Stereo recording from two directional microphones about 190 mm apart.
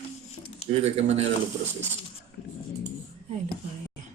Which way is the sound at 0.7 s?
35° right (ahead or behind).